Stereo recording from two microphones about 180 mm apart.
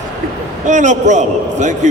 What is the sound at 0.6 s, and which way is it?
A man's voice, 40° right (ahead or behind).